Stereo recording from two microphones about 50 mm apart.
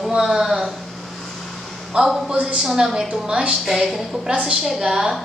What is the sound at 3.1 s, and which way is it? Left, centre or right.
Speech, right.